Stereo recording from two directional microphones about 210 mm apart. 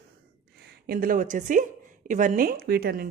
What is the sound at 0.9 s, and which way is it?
A woman's voice, 40° right (ahead or behind).